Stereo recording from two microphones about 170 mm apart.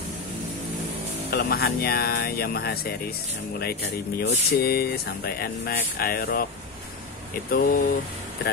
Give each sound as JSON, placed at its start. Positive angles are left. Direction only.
{"t": 1.3, "sound": "speech", "side_deg": 70}
{"t": 7.5, "sound": "speech", "side_deg": 55}